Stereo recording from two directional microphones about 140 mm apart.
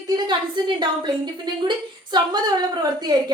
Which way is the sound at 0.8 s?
35° right (ahead or behind).